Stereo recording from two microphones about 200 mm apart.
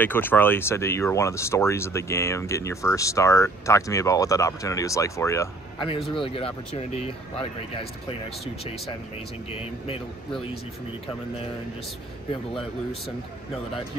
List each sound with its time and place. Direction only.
0.0 s speech: 10° left (ahead or behind)
5.9 s speech: 25° left (ahead or behind)